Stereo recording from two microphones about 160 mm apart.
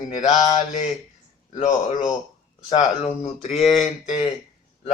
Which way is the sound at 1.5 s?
50° left (ahead or behind).